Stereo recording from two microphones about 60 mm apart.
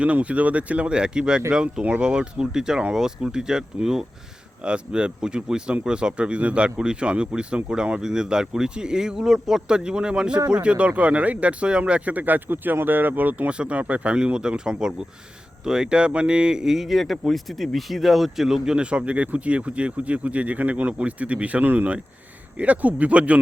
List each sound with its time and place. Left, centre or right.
0.0 s speech: right